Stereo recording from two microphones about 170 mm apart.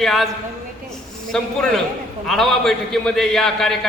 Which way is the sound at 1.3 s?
5° left (ahead or behind).